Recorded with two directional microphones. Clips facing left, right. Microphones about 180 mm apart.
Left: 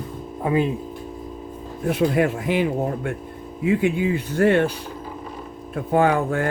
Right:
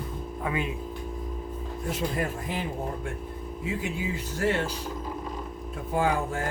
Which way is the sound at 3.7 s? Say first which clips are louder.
Left 12 dB; 60° left (ahead or behind).